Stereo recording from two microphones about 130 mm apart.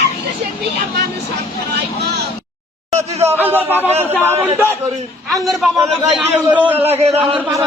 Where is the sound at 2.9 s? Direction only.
55° right (ahead or behind).